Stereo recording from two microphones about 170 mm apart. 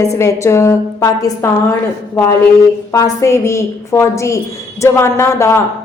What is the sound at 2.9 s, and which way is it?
A woman's voice, 20° left (ahead or behind).